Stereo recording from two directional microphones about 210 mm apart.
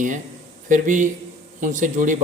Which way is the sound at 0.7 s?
35° right (ahead or behind).